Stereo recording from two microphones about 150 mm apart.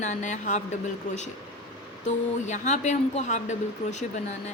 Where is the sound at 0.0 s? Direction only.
55° left (ahead or behind).